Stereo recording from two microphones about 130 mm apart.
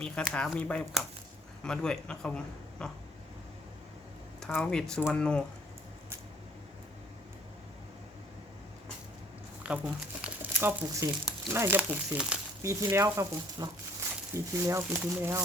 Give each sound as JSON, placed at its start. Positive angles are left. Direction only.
{"t": 0.0, "sound": "a man's voice", "side_deg": 5}
{"t": 4.5, "sound": "a man's voice", "side_deg": 5}
{"t": 9.6, "sound": "speech", "side_deg": -10}
{"t": 12.6, "sound": "speech", "side_deg": -20}